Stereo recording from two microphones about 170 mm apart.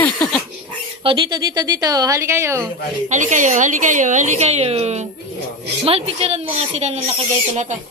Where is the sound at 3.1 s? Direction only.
45° right (ahead or behind).